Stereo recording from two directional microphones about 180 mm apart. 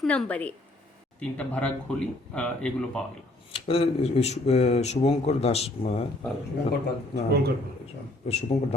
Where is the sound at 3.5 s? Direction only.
30° left (ahead or behind).